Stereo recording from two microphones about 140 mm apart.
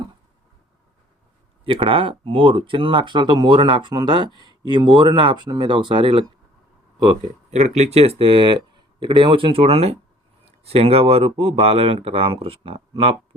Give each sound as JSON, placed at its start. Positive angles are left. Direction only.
{"t": 1.6, "sound": "speech", "side_deg": -40}
{"t": 7.5, "sound": "speech", "side_deg": -55}